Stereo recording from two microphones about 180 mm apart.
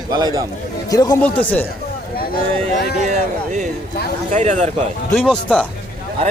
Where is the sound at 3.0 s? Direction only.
45° right (ahead or behind).